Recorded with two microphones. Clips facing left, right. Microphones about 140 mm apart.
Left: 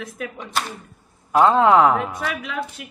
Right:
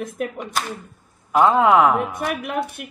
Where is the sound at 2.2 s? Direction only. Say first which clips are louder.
Right 3 dB; 55° right (ahead or behind).